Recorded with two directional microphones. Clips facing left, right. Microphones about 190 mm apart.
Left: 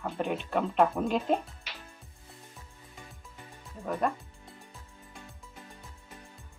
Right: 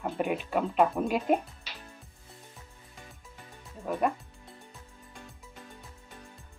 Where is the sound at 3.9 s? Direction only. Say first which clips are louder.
Right 1 dB; 5° right (ahead or behind).